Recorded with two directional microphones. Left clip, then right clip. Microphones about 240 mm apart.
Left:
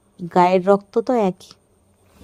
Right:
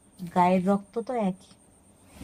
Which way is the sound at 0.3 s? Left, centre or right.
Left.